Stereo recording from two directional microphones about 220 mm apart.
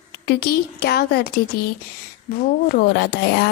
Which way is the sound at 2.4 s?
40° left (ahead or behind).